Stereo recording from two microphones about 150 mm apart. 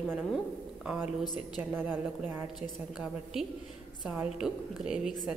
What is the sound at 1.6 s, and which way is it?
Speech, 10° right (ahead or behind).